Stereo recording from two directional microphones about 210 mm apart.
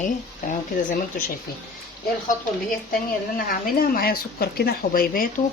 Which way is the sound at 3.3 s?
45° left (ahead or behind).